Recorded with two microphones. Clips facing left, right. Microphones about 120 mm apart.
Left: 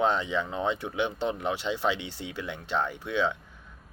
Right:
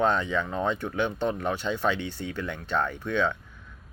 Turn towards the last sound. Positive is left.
turn(degrees=10)  # may be behind; listen again after turning